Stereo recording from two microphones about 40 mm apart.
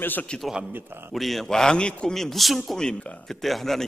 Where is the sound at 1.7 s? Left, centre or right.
Left.